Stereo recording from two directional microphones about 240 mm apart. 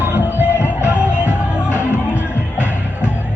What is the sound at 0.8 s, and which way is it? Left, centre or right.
Music, centre.